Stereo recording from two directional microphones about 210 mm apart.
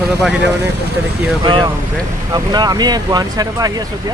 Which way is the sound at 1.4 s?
20° right (ahead or behind).